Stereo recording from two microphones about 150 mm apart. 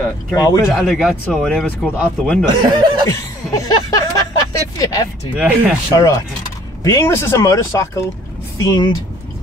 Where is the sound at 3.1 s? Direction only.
25° left (ahead or behind).